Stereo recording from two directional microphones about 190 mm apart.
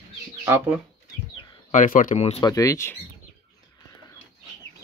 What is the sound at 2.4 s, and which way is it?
Speech, 20° left (ahead or behind).